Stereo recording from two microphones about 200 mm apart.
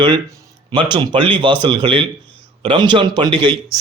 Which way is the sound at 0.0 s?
20° right (ahead or behind).